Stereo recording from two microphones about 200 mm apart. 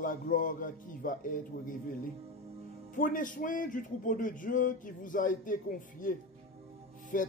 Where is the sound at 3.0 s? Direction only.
40° left (ahead or behind).